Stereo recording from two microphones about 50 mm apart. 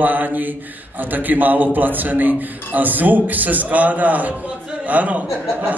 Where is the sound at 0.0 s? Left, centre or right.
Right.